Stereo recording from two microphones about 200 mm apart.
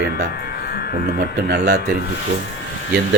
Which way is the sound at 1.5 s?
55° right (ahead or behind).